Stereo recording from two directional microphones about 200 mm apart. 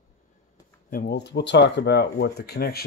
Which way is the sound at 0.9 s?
50° left (ahead or behind).